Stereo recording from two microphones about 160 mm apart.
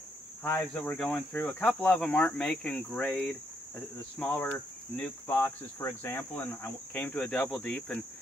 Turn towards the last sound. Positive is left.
turn(degrees=10)  # may be behind; listen again after turning